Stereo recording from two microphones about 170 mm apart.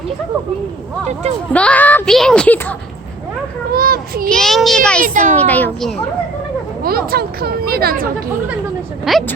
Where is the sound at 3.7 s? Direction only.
60° right (ahead or behind).